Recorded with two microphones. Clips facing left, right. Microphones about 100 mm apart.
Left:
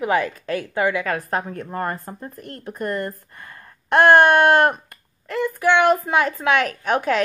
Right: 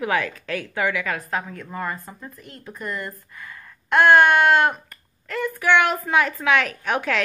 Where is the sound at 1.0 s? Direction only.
40° left (ahead or behind).